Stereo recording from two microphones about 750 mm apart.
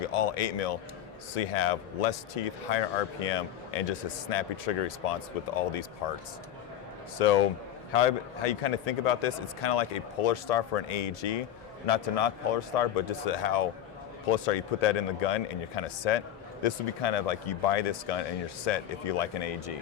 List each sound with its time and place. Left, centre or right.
0.0 s a man's voice: left
7.2 s a man's voice: left